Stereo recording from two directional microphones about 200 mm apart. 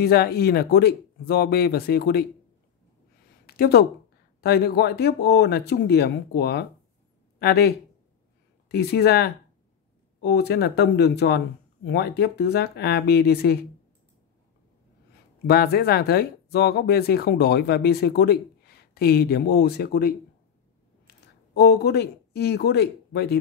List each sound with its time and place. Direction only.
0.0 s speech: 50° left (ahead or behind)
3.4 s speech: 50° left (ahead or behind)
15.4 s speech: 50° left (ahead or behind)
21.5 s speech: 55° left (ahead or behind)